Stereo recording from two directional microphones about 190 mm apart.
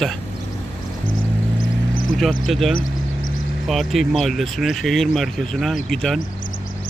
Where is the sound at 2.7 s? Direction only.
45° left (ahead or behind).